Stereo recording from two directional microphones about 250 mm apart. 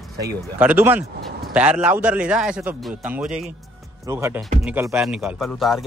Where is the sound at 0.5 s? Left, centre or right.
Centre.